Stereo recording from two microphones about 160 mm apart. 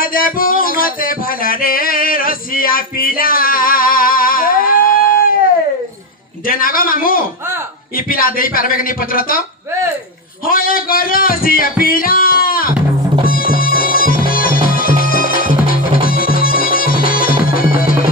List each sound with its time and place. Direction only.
0.0 s music: 65° left (ahead or behind)
6.4 s a man's voice: 60° left (ahead or behind)
10.4 s speech: 65° left (ahead or behind)
13.2 s music: 65° left (ahead or behind)